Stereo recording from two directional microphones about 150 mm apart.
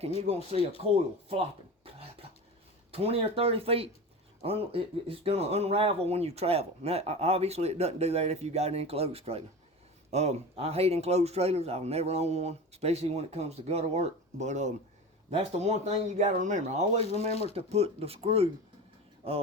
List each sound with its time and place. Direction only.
0.8 s speech: 40° right (ahead or behind)